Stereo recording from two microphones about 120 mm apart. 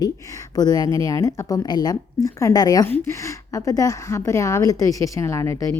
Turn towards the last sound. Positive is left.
turn(degrees=25)  # may be behind; listen again after turning